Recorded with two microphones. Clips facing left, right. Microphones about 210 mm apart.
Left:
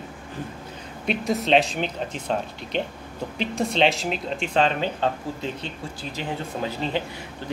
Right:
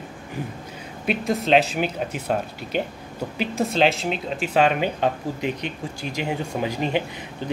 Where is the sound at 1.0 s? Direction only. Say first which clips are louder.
Right 1 dB; centre (ahead or behind).